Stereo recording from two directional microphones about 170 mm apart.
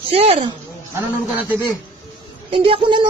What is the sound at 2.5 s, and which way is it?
Speech, 30° right (ahead or behind).